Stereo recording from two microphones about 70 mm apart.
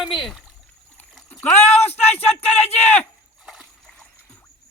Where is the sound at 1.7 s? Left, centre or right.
Left.